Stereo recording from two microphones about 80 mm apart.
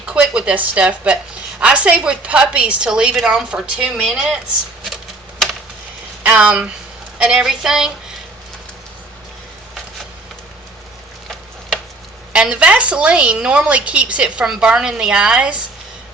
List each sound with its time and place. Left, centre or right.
0.0 s a woman's voice: centre
6.2 s a woman's voice: centre
12.3 s a woman's voice: centre